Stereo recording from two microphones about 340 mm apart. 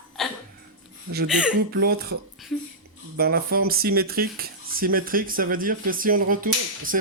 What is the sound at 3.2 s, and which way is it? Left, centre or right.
Speech, right.